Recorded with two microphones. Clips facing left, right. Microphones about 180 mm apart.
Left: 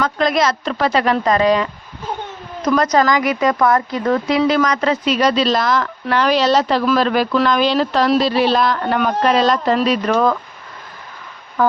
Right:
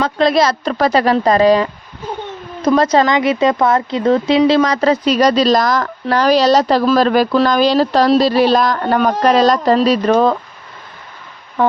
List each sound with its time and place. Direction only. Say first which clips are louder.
0.0 s speech: right 3 dB; 30° right (ahead or behind)